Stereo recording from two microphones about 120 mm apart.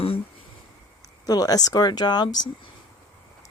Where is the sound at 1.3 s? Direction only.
30° left (ahead or behind).